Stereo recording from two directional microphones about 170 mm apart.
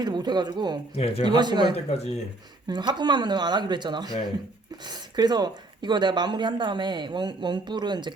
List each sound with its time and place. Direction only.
0.0 s speech: 25° right (ahead or behind)
0.9 s speech: 35° left (ahead or behind)
1.2 s speech: 25° right (ahead or behind)
1.7 s speech: 40° left (ahead or behind)
2.6 s speech: 25° right (ahead or behind)